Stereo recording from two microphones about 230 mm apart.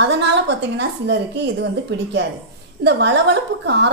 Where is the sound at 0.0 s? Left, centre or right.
Right.